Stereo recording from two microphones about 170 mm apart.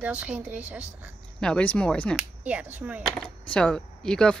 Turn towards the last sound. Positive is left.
turn(degrees=5)  # may be behind; listen again after turning